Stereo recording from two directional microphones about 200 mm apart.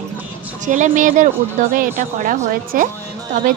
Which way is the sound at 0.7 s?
40° right (ahead or behind).